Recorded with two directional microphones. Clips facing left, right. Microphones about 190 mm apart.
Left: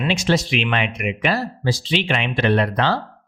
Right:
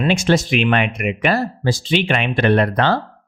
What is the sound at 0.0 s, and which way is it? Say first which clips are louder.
Speech: right 3 dB; 50° right (ahead or behind).